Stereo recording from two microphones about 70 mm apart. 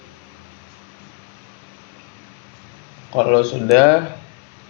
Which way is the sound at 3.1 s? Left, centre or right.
Centre.